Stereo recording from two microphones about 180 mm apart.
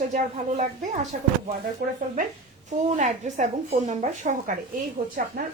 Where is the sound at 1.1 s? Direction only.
50° right (ahead or behind).